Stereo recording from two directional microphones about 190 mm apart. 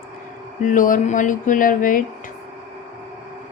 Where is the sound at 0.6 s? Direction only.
45° left (ahead or behind).